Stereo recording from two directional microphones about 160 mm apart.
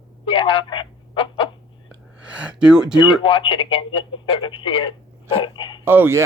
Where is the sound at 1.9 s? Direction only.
5° right (ahead or behind).